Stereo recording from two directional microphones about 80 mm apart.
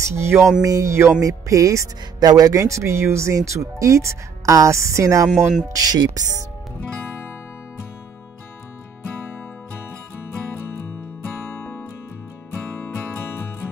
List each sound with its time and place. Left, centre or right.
0.0 s speech: right
1.2 s music: right
2.2 s speech: right
5.7 s music: right
12.7 s music: left